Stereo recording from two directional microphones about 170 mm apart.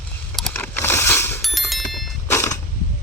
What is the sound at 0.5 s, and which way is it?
Mechanisms, 15° left (ahead or behind).